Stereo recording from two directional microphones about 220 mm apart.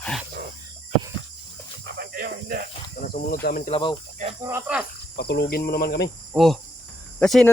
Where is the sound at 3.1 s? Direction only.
40° left (ahead or behind).